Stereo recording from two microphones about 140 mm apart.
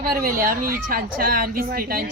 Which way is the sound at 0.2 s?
90° right.